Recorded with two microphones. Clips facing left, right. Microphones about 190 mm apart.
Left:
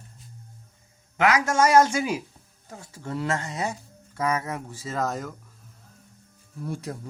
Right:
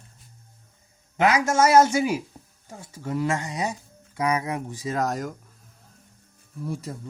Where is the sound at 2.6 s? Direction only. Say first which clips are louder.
Right 2 dB; 10° right (ahead or behind).